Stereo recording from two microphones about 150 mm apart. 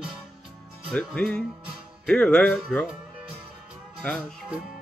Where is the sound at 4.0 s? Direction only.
5° left (ahead or behind).